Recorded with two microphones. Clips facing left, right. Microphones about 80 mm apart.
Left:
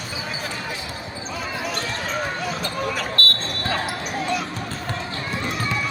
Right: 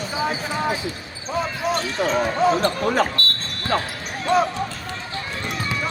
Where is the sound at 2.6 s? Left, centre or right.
Right.